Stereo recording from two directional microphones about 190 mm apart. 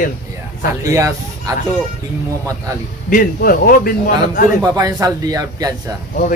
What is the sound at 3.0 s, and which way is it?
Speech, 45° left (ahead or behind).